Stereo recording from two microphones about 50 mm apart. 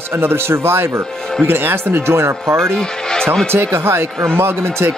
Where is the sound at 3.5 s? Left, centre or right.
Right.